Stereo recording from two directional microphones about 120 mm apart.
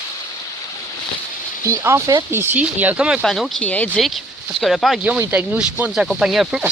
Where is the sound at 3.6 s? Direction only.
15° left (ahead or behind).